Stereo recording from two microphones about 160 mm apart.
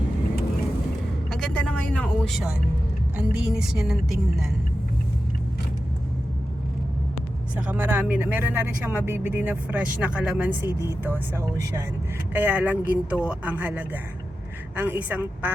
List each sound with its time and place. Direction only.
1.3 s a woman's voice: 5° left (ahead or behind)
3.2 s a woman's voice: 5° right (ahead or behind)
7.5 s speech: 10° right (ahead or behind)
10.7 s speech: 20° left (ahead or behind)
11.0 s speech: 15° right (ahead or behind)